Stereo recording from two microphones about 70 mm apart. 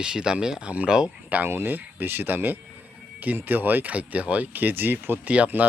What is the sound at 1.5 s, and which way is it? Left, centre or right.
Speech, right.